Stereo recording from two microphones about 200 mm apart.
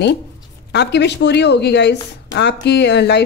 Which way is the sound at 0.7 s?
60° left (ahead or behind).